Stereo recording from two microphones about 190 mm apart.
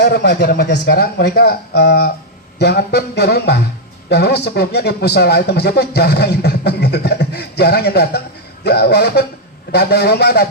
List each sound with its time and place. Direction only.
0.0 s speech: 60° left (ahead or behind)